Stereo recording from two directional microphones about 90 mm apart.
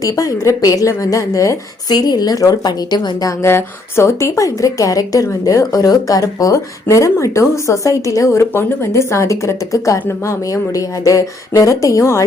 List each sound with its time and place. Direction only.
0.0 s a woman's voice: 40° left (ahead or behind)
3.2 s a woman's voice: 30° left (ahead or behind)